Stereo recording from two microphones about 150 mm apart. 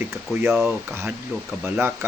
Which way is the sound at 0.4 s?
15° right (ahead or behind).